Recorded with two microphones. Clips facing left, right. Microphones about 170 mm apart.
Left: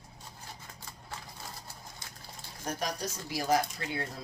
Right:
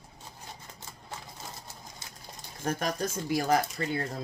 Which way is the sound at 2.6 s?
50° right (ahead or behind).